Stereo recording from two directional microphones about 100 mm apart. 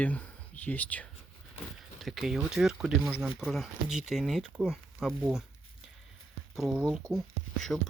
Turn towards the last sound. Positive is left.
turn(degrees=5)  # may be behind; listen again after turning